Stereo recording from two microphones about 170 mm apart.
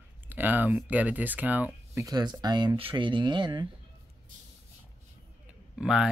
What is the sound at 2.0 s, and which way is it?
Speech, 25° right (ahead or behind).